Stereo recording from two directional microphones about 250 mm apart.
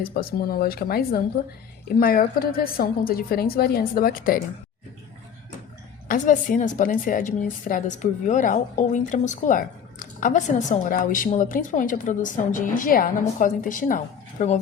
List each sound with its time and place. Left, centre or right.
0.0 s a woman's voice: left
6.1 s a woman's voice: left